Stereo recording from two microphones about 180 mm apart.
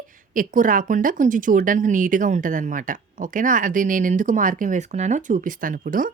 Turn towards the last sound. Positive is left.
turn(degrees=-50)  # may be behind; listen again after turning